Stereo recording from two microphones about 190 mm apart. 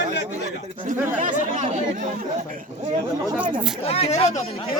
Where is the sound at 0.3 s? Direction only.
35° right (ahead or behind).